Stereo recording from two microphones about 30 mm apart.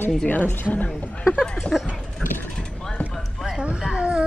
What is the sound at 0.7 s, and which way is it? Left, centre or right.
Speech, left.